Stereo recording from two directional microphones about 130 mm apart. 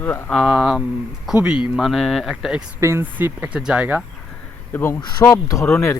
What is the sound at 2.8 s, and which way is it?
Speech, 20° right (ahead or behind).